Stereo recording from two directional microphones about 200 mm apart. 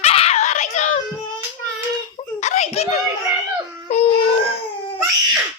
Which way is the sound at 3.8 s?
35° left (ahead or behind).